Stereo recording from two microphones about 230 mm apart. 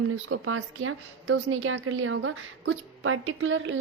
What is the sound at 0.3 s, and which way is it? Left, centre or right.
A woman's voice, right.